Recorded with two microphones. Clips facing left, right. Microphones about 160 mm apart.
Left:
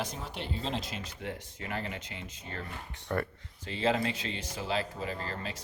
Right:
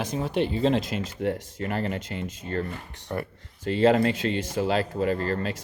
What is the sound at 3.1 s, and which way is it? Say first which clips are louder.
Speech: right 1 dB; 10° right (ahead or behind).